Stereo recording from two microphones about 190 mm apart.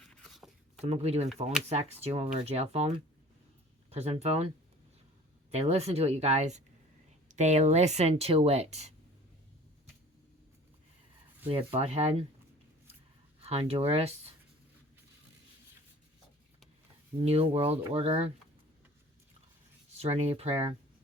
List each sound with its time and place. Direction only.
0.0 s a sound: 5° left (ahead or behind)
0.8 s speech: 35° right (ahead or behind)
11.4 s speech: 30° right (ahead or behind)
13.4 s speech: 30° right (ahead or behind)
17.2 s speech: 30° right (ahead or behind)
20.0 s speech: 35° right (ahead or behind)